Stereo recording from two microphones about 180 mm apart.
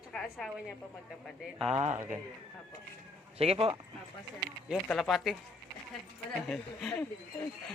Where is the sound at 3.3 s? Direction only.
35° right (ahead or behind).